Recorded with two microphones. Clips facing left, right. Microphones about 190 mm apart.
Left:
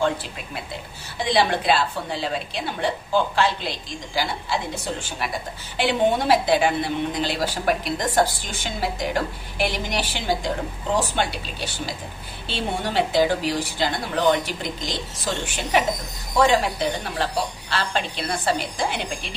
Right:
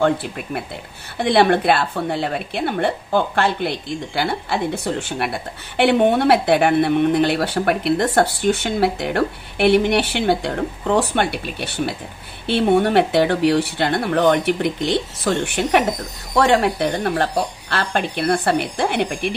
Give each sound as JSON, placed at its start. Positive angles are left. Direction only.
{"t": 0.0, "sound": "a woman's voice", "side_deg": -60}